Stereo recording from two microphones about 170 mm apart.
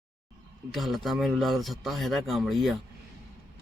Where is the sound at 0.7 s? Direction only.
Centre (ahead or behind).